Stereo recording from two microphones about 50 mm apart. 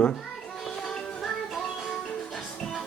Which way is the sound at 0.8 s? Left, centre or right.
Centre.